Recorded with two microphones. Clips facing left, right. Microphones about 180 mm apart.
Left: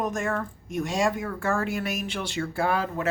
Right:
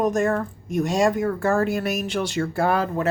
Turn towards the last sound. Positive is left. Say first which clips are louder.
# right 4 dB
turn(degrees=-40)  # may be behind; listen again after turning